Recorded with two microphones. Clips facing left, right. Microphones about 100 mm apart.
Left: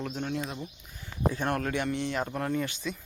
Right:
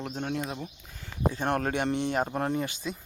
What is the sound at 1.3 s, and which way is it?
Speech, 30° right (ahead or behind).